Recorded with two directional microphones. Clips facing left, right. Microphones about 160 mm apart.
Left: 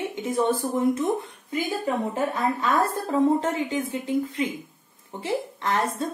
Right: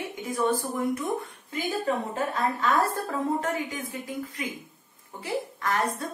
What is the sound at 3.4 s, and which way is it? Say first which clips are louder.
Speech: left 4 dB; 25° left (ahead or behind).